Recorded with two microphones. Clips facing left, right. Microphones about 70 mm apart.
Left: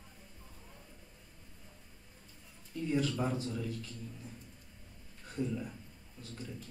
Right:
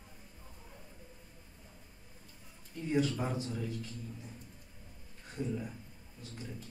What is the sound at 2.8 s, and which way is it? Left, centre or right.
A man's voice, centre.